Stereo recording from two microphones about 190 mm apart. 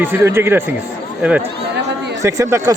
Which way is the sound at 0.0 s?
10° right (ahead or behind).